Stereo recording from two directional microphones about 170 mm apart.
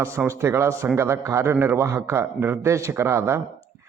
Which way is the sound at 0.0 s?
15° right (ahead or behind).